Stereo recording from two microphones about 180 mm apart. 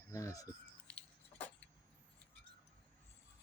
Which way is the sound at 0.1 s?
15° left (ahead or behind).